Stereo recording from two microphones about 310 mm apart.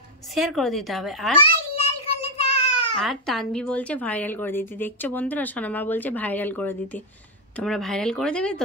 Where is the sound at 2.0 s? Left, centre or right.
Centre.